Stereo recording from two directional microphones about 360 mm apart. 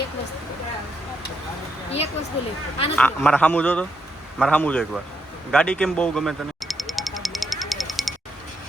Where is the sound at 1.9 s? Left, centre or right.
Centre.